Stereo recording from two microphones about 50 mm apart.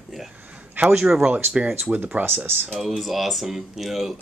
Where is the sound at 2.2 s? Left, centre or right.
Right.